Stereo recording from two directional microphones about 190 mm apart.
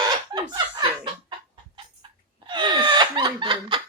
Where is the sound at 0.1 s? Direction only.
25° right (ahead or behind).